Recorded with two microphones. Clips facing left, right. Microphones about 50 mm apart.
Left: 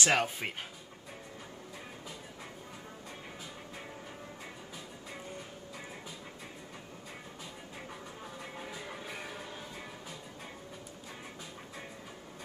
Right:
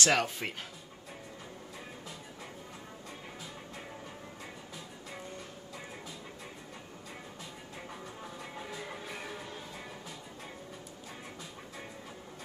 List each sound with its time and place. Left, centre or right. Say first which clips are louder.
0.0 s speech: even; centre
7.7 s music: right 2 dB; centre